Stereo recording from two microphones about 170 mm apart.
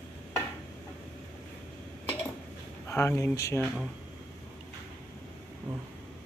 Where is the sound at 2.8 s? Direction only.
15° left (ahead or behind).